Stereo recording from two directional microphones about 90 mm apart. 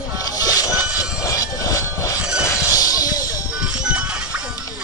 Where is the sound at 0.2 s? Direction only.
45° left (ahead or behind).